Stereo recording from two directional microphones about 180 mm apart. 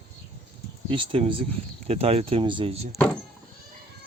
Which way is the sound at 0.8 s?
30° right (ahead or behind).